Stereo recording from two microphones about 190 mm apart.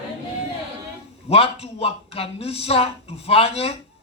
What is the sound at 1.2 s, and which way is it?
A man's voice, 30° left (ahead or behind).